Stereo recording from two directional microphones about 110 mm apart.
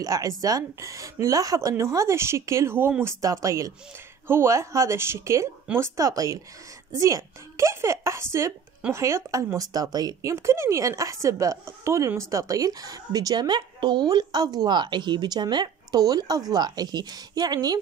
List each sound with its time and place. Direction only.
0.0 s a woman's voice: 30° right (ahead or behind)
10.3 s a woman's voice: 25° right (ahead or behind)